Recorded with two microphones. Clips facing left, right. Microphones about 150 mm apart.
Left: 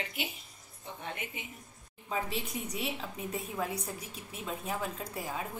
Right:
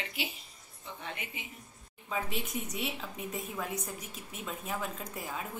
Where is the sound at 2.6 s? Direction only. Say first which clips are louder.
Even; 35° left (ahead or behind).